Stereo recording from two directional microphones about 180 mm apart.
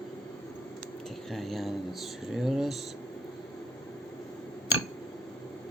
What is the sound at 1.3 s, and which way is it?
Speech, centre (ahead or behind).